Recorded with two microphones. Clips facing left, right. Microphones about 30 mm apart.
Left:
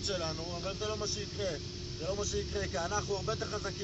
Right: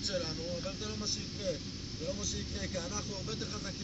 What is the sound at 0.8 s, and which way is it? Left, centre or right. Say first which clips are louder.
Speech: left 3 dB; left.